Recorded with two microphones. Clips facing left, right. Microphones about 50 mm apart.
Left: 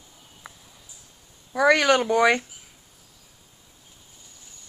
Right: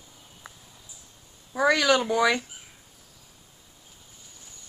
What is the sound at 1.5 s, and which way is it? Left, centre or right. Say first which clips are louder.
Speech: left 3 dB; left.